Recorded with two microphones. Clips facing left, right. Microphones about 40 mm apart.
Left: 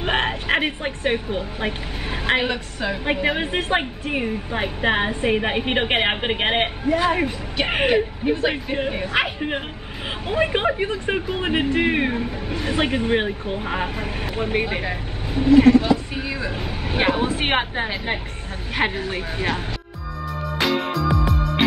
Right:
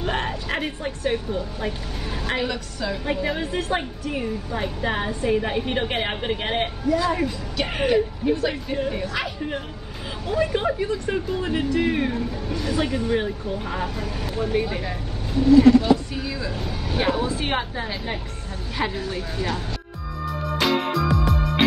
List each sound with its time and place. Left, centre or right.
0.0 s a woman's voice: left
15.4 s vehicle: left
16.2 s speech: left
20.5 s music: centre